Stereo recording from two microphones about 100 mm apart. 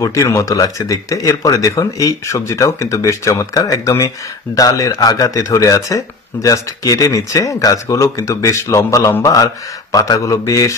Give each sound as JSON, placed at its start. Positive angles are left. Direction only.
{"t": 0.0, "sound": "speech", "side_deg": 35}